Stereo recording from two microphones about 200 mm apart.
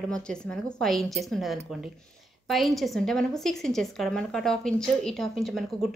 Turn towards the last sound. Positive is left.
turn(degrees=0)  # may be behind; listen again after turning